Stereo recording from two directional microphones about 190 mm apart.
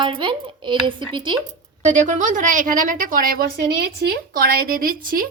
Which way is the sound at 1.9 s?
40° right (ahead or behind).